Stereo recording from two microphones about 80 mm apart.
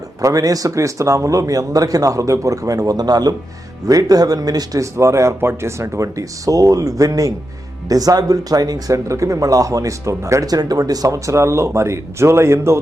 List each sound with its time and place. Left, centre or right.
0.2 s speech: right
10.5 s speech: right